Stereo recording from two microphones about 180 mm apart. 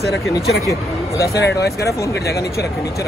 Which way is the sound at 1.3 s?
70° left (ahead or behind).